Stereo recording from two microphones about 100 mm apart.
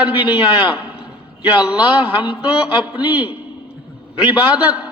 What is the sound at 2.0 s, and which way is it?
A man's voice, 15° right (ahead or behind).